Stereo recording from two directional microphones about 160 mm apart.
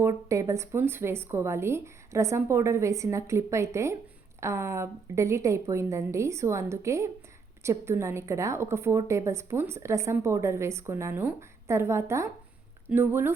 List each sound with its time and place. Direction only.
0.0 s a woman's voice: 20° right (ahead or behind)